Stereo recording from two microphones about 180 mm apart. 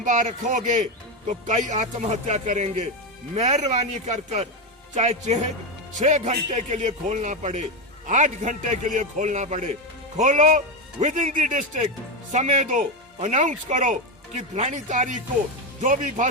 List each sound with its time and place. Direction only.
0.0 s speech: 45° right (ahead or behind)